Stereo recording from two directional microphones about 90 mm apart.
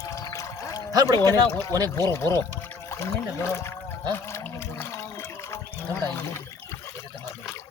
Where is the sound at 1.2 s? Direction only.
35° left (ahead or behind).